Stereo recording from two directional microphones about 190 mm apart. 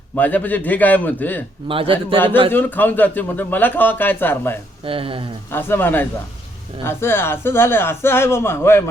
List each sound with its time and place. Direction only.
0.2 s speech: 10° left (ahead or behind)
1.6 s a man's voice: 30° right (ahead or behind)
2.5 s speech: 10° left (ahead or behind)
4.9 s a man's voice: 30° right (ahead or behind)
5.5 s speech: 10° left (ahead or behind)